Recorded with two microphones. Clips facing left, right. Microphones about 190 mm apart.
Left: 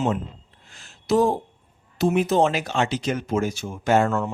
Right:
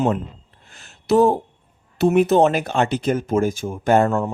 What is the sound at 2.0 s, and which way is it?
Speech, 60° right (ahead or behind).